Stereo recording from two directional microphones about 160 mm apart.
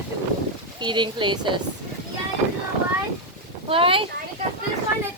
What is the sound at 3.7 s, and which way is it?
Speech, 35° right (ahead or behind).